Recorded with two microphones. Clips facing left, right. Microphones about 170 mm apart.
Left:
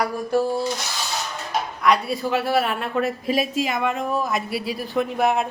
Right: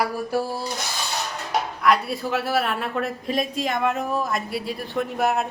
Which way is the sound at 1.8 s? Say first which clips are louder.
Left 2 dB; centre (ahead or behind).